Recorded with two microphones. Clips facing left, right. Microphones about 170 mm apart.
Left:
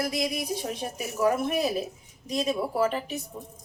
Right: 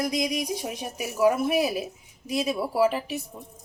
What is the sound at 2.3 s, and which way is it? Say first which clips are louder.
Sizzle: right 1 dB; 10° right (ahead or behind).